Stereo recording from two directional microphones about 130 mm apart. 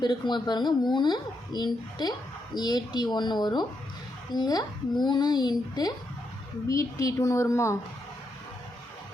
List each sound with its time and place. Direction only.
0.0 s a woman's voice: 35° left (ahead or behind)